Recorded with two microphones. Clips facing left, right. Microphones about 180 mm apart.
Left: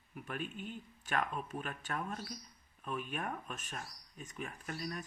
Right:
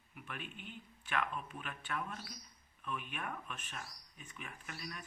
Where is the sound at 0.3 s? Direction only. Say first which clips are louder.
Left 7 dB; 40° left (ahead or behind).